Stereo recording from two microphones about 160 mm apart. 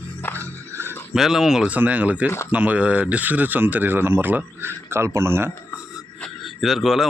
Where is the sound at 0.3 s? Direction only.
15° right (ahead or behind).